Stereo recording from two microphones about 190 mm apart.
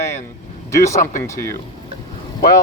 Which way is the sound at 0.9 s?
45° left (ahead or behind).